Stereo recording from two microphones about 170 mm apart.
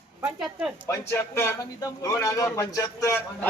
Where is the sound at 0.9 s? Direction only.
15° left (ahead or behind).